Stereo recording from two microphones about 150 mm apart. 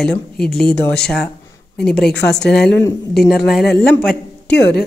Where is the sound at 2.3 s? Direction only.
5° left (ahead or behind).